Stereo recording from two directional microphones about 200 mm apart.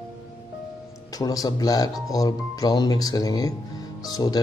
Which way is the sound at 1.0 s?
20° left (ahead or behind).